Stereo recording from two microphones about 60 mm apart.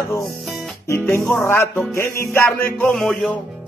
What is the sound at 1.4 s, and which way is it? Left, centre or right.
Speech, left.